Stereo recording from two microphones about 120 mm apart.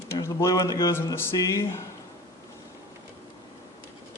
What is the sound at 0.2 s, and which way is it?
Speech, 25° left (ahead or behind).